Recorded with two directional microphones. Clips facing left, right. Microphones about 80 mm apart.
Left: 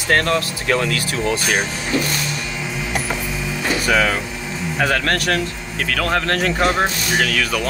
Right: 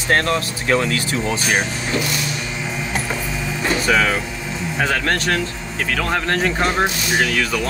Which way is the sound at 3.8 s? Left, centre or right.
Centre.